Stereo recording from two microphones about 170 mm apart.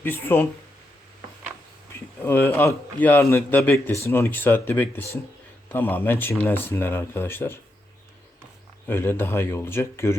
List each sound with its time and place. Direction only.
0.0 s a man's voice: 10° left (ahead or behind)
2.2 s a man's voice: 10° left (ahead or behind)
8.9 s a man's voice: 15° left (ahead or behind)